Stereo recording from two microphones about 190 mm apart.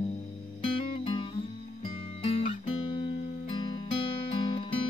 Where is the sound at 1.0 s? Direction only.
25° left (ahead or behind).